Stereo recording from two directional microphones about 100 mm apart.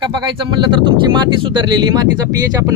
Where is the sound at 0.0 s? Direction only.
50° right (ahead or behind).